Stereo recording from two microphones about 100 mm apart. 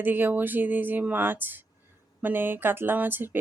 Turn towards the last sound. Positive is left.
turn(degrees=-20)  # may be behind; listen again after turning